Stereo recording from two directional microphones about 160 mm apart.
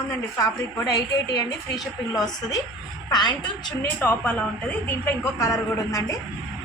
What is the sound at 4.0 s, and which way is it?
Speech, 10° left (ahead or behind).